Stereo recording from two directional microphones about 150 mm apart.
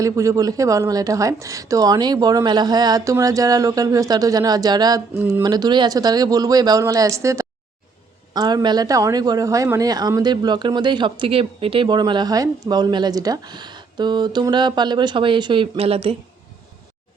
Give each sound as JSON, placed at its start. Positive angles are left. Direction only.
{"t": 0.0, "sound": "speech", "side_deg": -20}